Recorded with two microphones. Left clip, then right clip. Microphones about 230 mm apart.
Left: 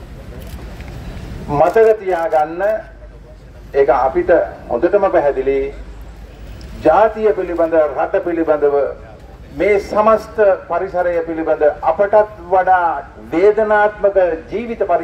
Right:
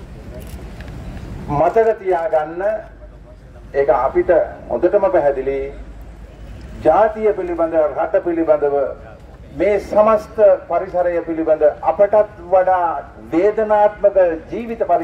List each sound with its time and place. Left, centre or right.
1.5 s a man's voice: left
3.7 s a man's voice: left
6.8 s a man's voice: left